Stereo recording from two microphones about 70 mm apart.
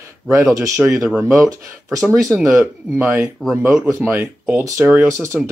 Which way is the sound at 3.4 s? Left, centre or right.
Centre.